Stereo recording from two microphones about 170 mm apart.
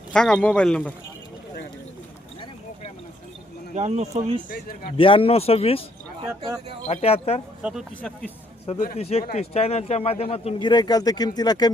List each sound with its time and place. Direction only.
0.1 s speech: 5° left (ahead or behind)
3.8 s speech: 40° right (ahead or behind)
4.4 s speech: 60° left (ahead or behind)
4.9 s speech: 30° left (ahead or behind)
6.8 s speech: 40° left (ahead or behind)
7.6 s speech: 5° right (ahead or behind)
9.0 s speech: 35° left (ahead or behind)